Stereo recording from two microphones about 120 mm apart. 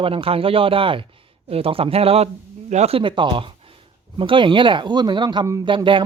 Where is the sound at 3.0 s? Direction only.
45° right (ahead or behind).